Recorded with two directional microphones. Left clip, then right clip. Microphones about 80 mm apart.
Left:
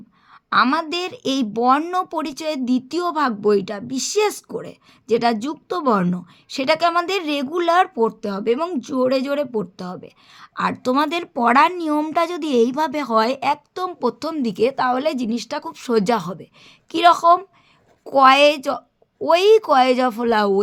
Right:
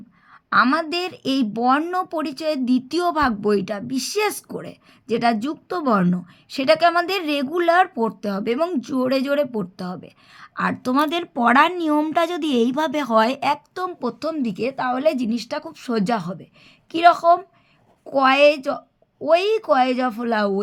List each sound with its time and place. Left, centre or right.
0.5 s speech: left
2.9 s speech: left
7.9 s speech: left
14.0 s speech: left
14.9 s speech: left
16.9 s speech: left